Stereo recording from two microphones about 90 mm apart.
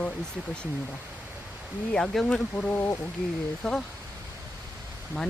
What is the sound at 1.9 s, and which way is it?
Speech, 5° left (ahead or behind).